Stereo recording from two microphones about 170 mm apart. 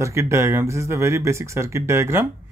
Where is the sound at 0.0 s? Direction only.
15° right (ahead or behind).